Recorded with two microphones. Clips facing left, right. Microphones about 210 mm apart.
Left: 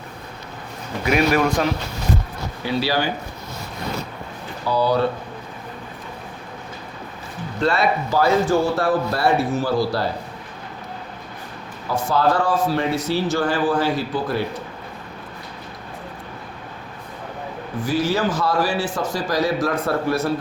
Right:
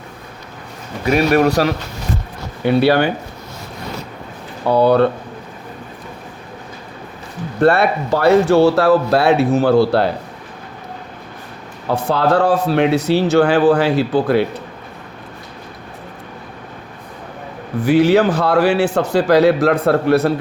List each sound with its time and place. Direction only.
1.4 s speech: 40° right (ahead or behind)
2.6 s speech: 60° right (ahead or behind)
4.6 s speech: 60° right (ahead or behind)
7.6 s speech: 60° right (ahead or behind)
11.9 s speech: 65° right (ahead or behind)
17.8 s speech: 65° right (ahead or behind)